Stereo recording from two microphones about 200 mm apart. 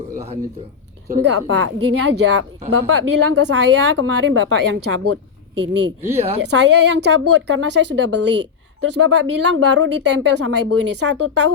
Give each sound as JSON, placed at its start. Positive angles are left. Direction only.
{"t": 1.2, "sound": "a woman's voice", "side_deg": -65}
{"t": 5.6, "sound": "a woman's voice", "side_deg": -65}
{"t": 6.1, "sound": "speech", "side_deg": -30}
{"t": 6.4, "sound": "a woman's voice", "side_deg": -60}
{"t": 9.0, "sound": "speech", "side_deg": -90}
{"t": 11.0, "sound": "speech", "side_deg": -90}